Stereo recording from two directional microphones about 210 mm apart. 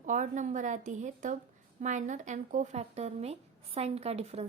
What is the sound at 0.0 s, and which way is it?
A woman's voice, 35° right (ahead or behind).